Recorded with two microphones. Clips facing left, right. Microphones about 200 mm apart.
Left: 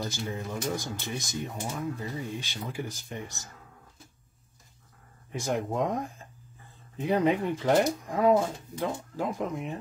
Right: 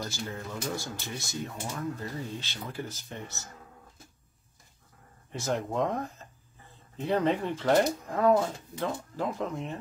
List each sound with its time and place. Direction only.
0.0 s speech: 15° left (ahead or behind)
5.4 s speech: 15° left (ahead or behind)